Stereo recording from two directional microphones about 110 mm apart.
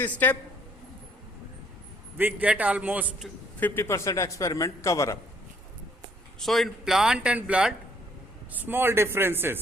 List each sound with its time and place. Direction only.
0.0 s a man's voice: 15° left (ahead or behind)
2.1 s a man's voice: 15° right (ahead or behind)
3.6 s a man's voice: 25° left (ahead or behind)
6.4 s a man's voice: centre (ahead or behind); by 9.6 s 20° right (ahead or behind)